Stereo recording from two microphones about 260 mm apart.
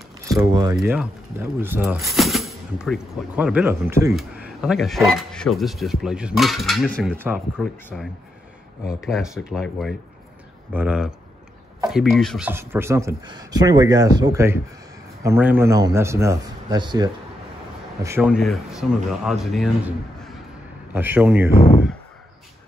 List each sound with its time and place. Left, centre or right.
0.5 s speech: centre
0.7 s speech: centre